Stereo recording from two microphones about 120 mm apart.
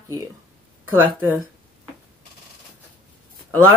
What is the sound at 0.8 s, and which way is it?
Speech, 15° right (ahead or behind).